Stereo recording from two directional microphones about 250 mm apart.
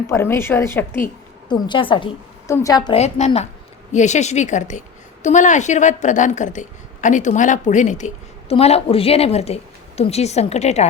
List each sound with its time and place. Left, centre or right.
0.1 s a woman's voice: centre; by 10.8 s left